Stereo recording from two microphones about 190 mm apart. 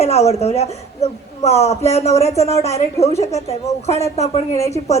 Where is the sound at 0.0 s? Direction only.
35° left (ahead or behind).